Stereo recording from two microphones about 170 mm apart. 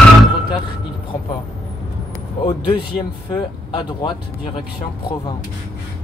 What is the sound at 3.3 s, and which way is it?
Speech, 25° left (ahead or behind).